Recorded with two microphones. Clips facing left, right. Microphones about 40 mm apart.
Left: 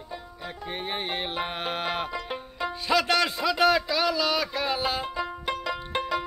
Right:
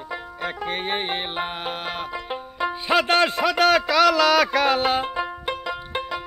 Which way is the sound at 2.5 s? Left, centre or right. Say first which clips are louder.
Right 4 dB; right.